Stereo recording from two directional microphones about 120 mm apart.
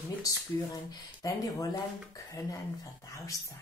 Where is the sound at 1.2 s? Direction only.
30° left (ahead or behind).